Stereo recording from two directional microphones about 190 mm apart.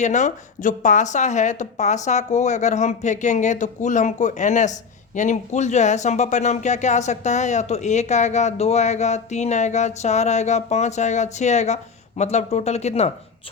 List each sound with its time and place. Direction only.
0.0 s a woman's voice: 40° left (ahead or behind)